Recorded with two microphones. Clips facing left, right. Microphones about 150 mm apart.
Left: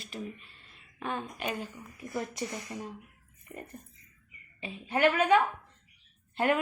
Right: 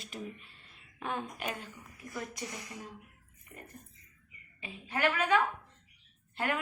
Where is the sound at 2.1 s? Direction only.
25° left (ahead or behind).